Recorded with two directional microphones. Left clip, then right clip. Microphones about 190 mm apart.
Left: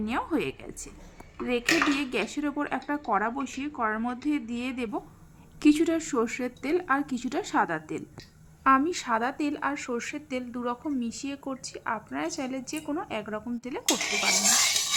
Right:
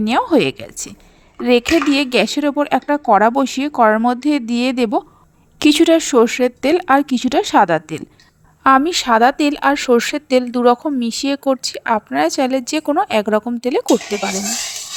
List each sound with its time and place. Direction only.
0.0 s speech: 45° right (ahead or behind)